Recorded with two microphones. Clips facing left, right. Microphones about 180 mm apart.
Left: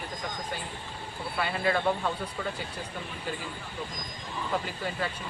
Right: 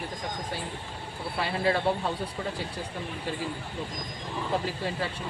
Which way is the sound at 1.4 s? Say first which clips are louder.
Right 1 dB; 30° right (ahead or behind).